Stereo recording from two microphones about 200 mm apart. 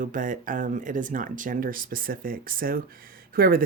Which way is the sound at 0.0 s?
40° right (ahead or behind).